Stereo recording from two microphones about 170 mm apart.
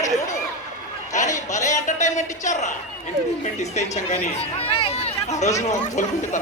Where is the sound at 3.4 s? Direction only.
40° left (ahead or behind).